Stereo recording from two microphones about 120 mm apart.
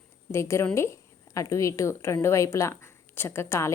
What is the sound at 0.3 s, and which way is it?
A woman's voice, 25° left (ahead or behind).